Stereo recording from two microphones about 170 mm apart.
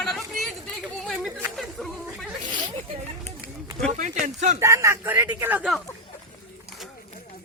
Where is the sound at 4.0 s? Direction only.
45° right (ahead or behind).